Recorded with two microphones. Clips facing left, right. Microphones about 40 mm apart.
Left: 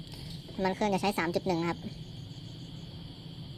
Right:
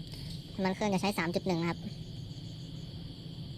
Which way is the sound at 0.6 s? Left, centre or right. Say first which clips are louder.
Left 2 dB; left.